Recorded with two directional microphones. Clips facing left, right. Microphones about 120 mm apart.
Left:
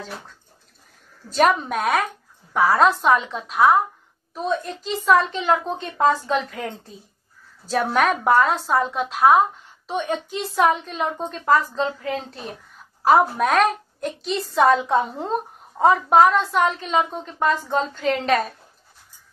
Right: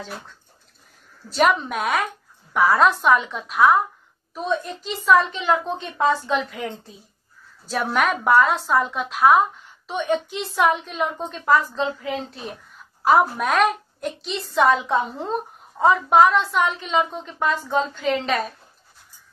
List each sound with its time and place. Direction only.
1.4 s a woman's voice: 40° left (ahead or behind)
7.7 s a woman's voice: 35° left (ahead or behind)
13.0 s a woman's voice: 40° left (ahead or behind)